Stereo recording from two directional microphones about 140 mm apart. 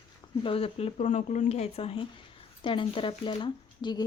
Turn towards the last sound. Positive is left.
turn(degrees=35)  # may be behind; listen again after turning